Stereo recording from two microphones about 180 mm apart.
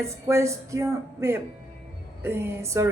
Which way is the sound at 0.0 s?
15° right (ahead or behind).